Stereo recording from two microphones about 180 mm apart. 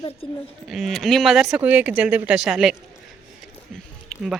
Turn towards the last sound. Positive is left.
turn(degrees=5)  # may be behind; listen again after turning